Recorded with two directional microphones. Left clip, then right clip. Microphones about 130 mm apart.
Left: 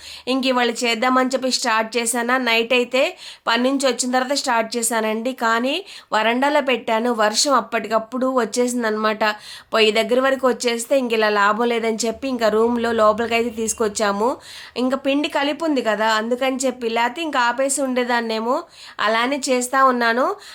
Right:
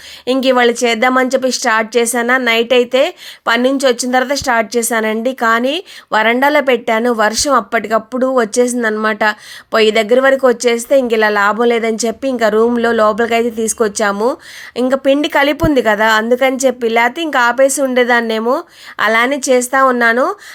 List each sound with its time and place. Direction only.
0.3 s speech: 45° right (ahead or behind)